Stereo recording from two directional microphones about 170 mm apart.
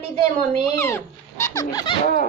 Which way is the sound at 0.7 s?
15° left (ahead or behind).